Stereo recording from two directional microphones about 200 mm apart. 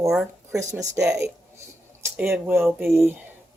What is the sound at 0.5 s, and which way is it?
A woman's voice, 15° right (ahead or behind).